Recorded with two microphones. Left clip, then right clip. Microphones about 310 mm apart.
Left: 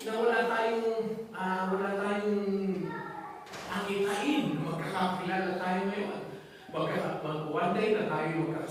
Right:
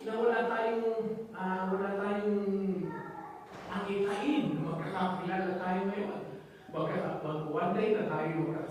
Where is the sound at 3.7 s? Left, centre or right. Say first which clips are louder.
Left 2 dB; centre.